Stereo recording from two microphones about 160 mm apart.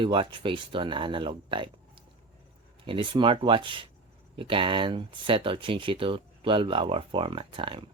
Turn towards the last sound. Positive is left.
turn(degrees=-30)  # may be behind; listen again after turning